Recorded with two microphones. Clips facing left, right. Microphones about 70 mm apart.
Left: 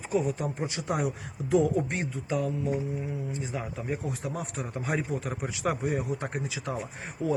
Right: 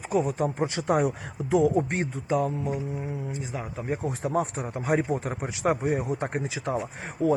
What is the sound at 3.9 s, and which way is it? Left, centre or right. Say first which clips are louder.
Speech: right 7 dB; right.